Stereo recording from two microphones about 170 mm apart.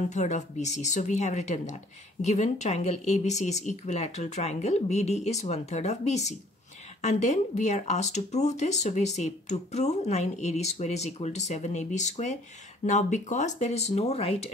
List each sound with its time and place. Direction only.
0.1 s speech: 45° left (ahead or behind)